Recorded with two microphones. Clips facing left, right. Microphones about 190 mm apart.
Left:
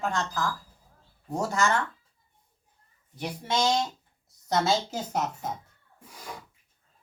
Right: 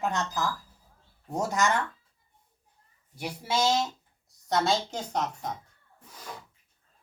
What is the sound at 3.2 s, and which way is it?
A woman's voice, 10° right (ahead or behind).